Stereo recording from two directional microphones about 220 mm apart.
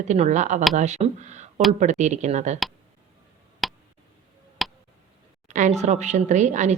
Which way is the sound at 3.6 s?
Centre (ahead or behind).